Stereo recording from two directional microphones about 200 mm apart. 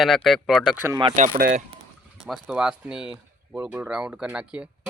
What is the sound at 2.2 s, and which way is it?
Speech, centre (ahead or behind).